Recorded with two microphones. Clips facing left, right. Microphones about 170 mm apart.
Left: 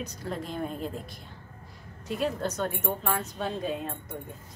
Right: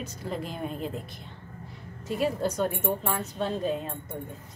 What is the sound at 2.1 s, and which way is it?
Speech, 5° right (ahead or behind).